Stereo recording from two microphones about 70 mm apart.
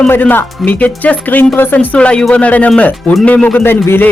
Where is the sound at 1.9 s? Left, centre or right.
Centre.